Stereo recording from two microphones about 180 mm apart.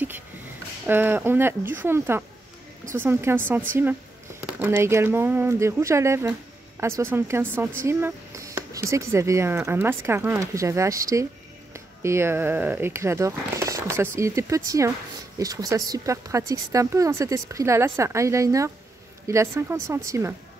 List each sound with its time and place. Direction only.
0.8 s speech: 10° right (ahead or behind)